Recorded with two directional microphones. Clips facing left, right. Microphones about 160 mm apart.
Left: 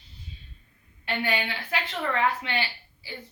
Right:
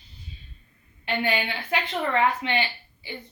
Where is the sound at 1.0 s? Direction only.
20° right (ahead or behind).